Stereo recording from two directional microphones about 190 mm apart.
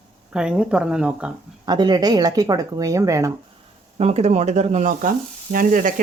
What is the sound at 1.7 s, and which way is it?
Speech, 20° right (ahead or behind).